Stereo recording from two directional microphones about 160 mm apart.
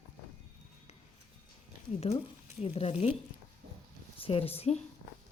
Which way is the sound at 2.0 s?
40° left (ahead or behind).